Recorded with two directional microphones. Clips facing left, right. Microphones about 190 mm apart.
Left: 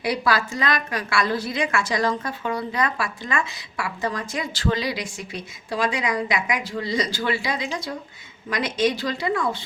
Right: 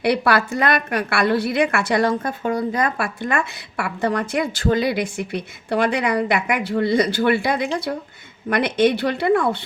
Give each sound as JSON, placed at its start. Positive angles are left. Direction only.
{"t": 0.0, "sound": "a woman's voice", "side_deg": -65}